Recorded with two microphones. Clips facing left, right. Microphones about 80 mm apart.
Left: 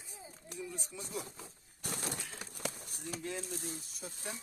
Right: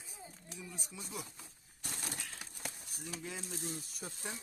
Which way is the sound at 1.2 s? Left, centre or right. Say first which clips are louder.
Left 4 dB; left.